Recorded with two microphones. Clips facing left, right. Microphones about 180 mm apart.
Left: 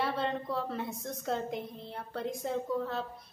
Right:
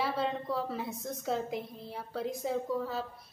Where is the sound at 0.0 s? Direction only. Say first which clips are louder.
Even; centre (ahead or behind).